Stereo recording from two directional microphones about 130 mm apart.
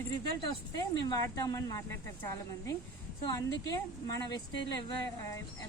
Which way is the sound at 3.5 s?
30° left (ahead or behind).